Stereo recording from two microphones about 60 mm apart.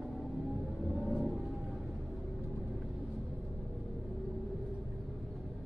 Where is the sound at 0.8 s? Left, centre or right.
Centre.